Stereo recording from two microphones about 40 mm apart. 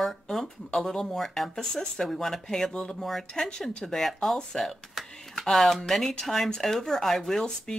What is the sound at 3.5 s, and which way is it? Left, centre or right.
Speech, centre.